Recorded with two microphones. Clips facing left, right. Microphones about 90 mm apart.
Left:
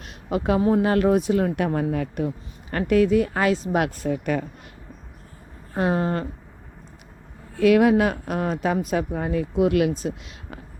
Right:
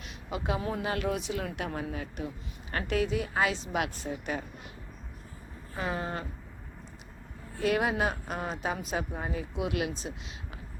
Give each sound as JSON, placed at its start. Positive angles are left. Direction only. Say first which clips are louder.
{"t": 0.0, "sound": "a sound", "louder": "left 10 dB", "side_deg": 50}
{"t": 0.8, "sound": "speech", "louder": "left 12 dB", "side_deg": 45}
{"t": 4.1, "sound": "speech", "louder": "left 10 dB", "side_deg": 70}
{"t": 5.7, "sound": "a woman's voice", "louder": "left 10 dB", "side_deg": 55}
{"t": 7.5, "sound": "a woman's voice", "louder": "left 11 dB", "side_deg": 65}